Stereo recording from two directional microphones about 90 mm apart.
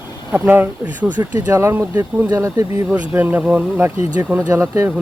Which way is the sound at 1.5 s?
30° right (ahead or behind).